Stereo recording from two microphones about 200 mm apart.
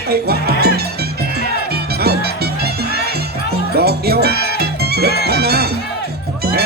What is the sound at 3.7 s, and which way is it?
Music, 50° right (ahead or behind).